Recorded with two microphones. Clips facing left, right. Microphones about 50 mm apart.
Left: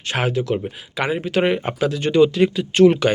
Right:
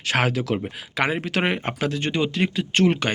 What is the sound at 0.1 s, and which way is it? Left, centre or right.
Speech, right.